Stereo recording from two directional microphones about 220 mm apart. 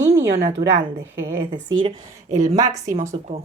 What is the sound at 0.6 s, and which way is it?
Speech, 30° right (ahead or behind).